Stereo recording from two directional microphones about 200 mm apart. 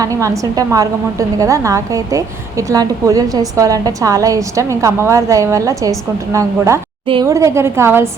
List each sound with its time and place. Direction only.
0.0 s a woman's voice: 15° right (ahead or behind)